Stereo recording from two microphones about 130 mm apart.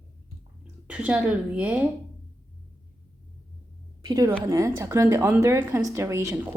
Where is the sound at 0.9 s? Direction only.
10° right (ahead or behind).